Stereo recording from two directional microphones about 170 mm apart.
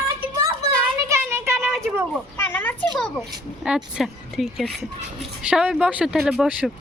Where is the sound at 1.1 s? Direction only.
15° right (ahead or behind).